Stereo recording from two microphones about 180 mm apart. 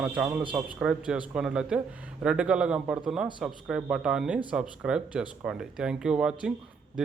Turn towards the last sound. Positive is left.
turn(degrees=-5)  # may be behind; listen again after turning